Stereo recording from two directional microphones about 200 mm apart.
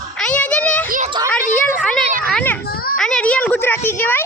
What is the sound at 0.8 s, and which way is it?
Speech, 40° right (ahead or behind).